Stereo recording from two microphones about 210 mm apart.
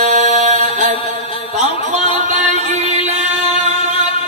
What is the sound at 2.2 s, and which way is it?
Music, 35° right (ahead or behind).